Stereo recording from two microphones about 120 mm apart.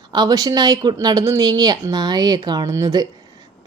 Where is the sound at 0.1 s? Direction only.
30° right (ahead or behind).